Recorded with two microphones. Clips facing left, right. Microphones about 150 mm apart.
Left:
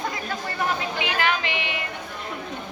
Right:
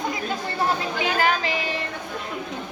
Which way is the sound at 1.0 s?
40° right (ahead or behind).